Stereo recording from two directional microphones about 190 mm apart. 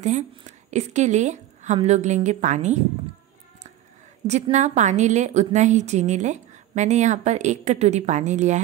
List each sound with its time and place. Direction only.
0.0 s a woman's voice: 40° right (ahead or behind)
4.3 s a woman's voice: 40° right (ahead or behind)